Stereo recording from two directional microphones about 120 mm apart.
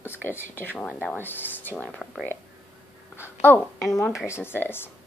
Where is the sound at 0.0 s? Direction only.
20° left (ahead or behind).